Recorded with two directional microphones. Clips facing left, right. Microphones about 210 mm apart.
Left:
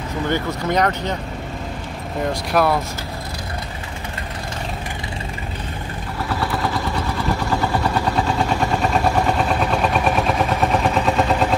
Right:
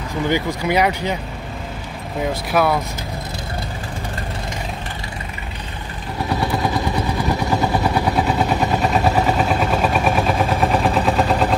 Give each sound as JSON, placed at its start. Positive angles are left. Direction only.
{"t": 0.3, "sound": "speech", "side_deg": -10}
{"t": 2.2, "sound": "speech", "side_deg": 0}
{"t": 6.2, "sound": "vehicle", "side_deg": -15}
{"t": 7.7, "sound": "vehicle", "side_deg": -10}